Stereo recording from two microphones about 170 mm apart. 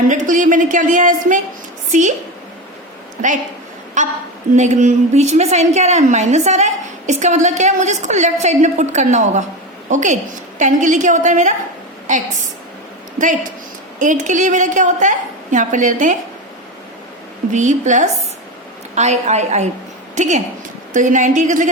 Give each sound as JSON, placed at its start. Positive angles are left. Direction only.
{"t": 0.1, "sound": "a woman's voice", "side_deg": -45}
{"t": 4.0, "sound": "a woman's voice", "side_deg": -45}
{"t": 14.0, "sound": "a woman's voice", "side_deg": -45}
{"t": 17.5, "sound": "a woman's voice", "side_deg": -45}